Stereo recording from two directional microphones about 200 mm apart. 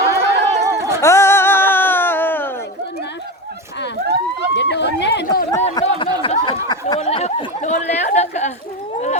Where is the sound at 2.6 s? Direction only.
55° left (ahead or behind).